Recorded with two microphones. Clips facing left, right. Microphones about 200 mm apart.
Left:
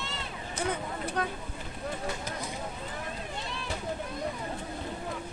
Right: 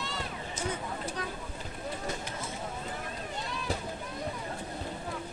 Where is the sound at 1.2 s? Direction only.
60° left (ahead or behind).